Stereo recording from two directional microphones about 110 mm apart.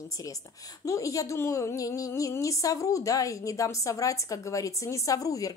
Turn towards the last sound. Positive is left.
turn(degrees=30)  # may be behind; listen again after turning